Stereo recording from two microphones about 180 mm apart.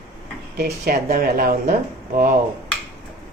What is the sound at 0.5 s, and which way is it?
Speech, 60° right (ahead or behind).